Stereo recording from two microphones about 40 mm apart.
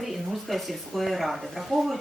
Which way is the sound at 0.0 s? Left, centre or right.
Centre.